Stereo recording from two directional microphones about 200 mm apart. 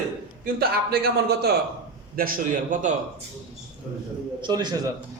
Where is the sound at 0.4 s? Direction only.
50° right (ahead or behind).